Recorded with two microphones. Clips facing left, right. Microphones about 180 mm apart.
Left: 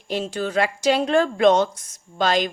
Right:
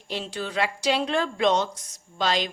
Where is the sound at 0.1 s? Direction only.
45° left (ahead or behind).